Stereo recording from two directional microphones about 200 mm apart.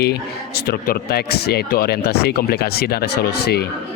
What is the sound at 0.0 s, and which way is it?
Speech, 50° left (ahead or behind).